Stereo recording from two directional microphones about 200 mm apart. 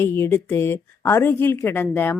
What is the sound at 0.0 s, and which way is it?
A woman's voice, 10° left (ahead or behind).